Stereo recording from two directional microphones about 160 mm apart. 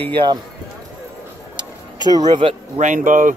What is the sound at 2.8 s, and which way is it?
Speech, 50° right (ahead or behind).